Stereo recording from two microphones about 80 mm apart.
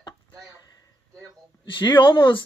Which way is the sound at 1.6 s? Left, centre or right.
Left.